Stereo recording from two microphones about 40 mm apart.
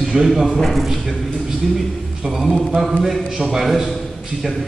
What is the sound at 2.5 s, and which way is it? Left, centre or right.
A man's voice, centre.